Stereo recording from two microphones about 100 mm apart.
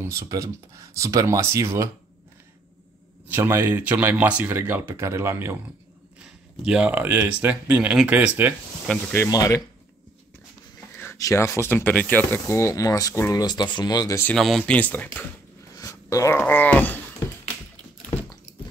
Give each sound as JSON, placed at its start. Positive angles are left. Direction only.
{"t": 0.0, "sound": "speech", "side_deg": -30}
{"t": 3.3, "sound": "speech", "side_deg": -25}
{"t": 6.2, "sound": "speech", "side_deg": -10}
{"t": 8.9, "sound": "speech", "side_deg": 5}
{"t": 9.3, "sound": "speech", "side_deg": 35}
{"t": 11.1, "sound": "speech", "side_deg": 30}
{"t": 14.3, "sound": "speech", "side_deg": 0}
{"t": 14.6, "sound": "speech", "side_deg": 15}
{"t": 15.8, "sound": "speech", "side_deg": 30}